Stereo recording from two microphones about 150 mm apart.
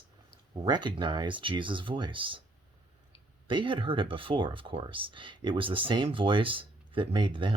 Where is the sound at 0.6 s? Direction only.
30° right (ahead or behind).